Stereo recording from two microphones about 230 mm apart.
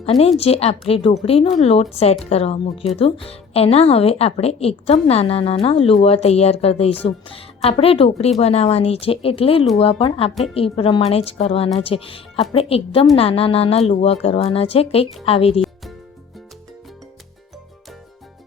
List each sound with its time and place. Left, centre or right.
0.0 s a woman's voice: left
15.6 s music: centre